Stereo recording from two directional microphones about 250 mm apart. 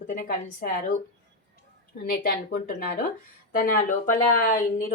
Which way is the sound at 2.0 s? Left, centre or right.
Left.